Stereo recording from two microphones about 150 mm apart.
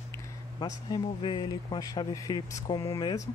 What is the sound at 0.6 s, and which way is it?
A man's voice, 30° left (ahead or behind).